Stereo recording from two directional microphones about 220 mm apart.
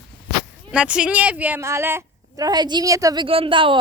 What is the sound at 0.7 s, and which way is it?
A woman's voice, 5° right (ahead or behind).